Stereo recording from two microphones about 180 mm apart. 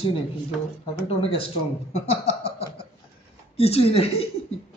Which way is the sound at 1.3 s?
35° left (ahead or behind).